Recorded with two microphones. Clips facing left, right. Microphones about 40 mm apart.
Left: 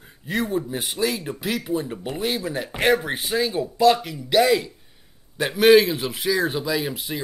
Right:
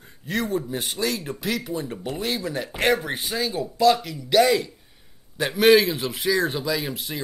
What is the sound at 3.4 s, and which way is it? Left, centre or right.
A man's voice, centre.